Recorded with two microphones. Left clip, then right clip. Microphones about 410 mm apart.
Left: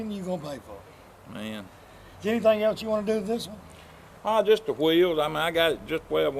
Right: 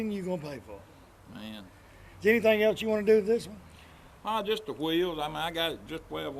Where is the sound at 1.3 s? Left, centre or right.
Left.